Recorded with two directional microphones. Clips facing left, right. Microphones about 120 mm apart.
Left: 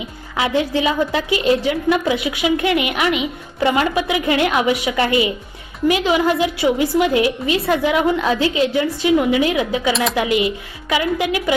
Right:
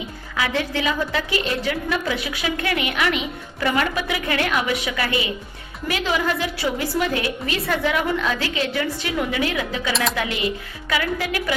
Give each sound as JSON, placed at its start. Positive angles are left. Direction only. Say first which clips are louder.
{"t": 0.3, "sound": "a woman's voice", "louder": "left 5 dB", "side_deg": 25}
{"t": 9.9, "sound": "speech", "louder": "left 4 dB", "side_deg": 0}
{"t": 10.2, "sound": "a woman's voice", "louder": "left 6 dB", "side_deg": 15}